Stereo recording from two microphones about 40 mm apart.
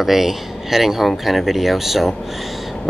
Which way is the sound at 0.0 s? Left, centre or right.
Centre.